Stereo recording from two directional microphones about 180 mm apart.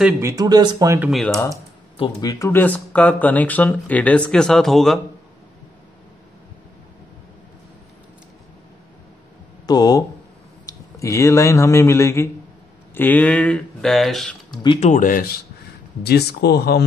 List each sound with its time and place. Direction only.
0.2 s speech: 20° right (ahead or behind)
1.1 s speech: centre (ahead or behind)
2.0 s speech: 25° left (ahead or behind); by 5.0 s centre (ahead or behind)
9.7 s speech: 20° left (ahead or behind); by 14.6 s centre (ahead or behind)
14.8 s speech: 45° left (ahead or behind)
16.0 s speech: 65° left (ahead or behind)